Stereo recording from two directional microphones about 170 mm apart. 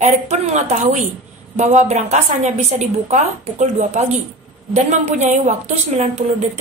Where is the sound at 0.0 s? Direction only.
45° right (ahead or behind).